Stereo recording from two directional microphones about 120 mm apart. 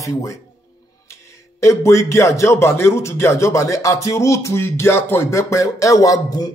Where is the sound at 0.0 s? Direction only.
25° left (ahead or behind).